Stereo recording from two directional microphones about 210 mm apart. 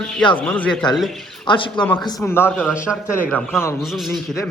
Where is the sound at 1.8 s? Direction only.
5° left (ahead or behind).